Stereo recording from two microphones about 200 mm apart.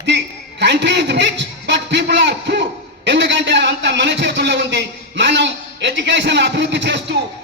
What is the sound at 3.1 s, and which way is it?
A man's voice, 60° right (ahead or behind).